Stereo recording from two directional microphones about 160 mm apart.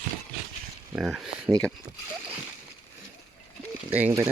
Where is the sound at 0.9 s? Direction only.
5° right (ahead or behind).